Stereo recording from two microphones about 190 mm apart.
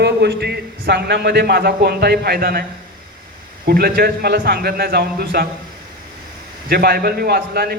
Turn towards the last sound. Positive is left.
turn(degrees=-55)  # may be behind; listen again after turning